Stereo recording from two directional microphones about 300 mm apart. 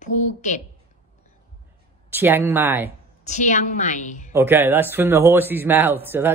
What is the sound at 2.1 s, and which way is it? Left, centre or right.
Speech, centre.